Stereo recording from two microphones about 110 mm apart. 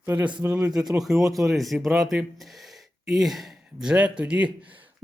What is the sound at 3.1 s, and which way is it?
Speech, centre (ahead or behind).